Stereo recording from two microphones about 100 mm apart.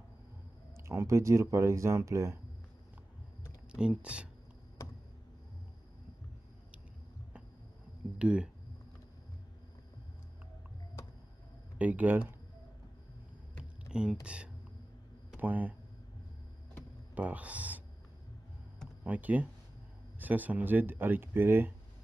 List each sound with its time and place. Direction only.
0.8 s speech: 30° right (ahead or behind)
3.7 s speech: 10° right (ahead or behind)
8.2 s speech: 10° right (ahead or behind)
11.8 s speech: 15° right (ahead or behind)
13.8 s a sound: 10° right (ahead or behind)
14.2 s speech: 10° right (ahead or behind)
17.1 s speech: 15° right (ahead or behind)
19.0 s speech: 15° right (ahead or behind)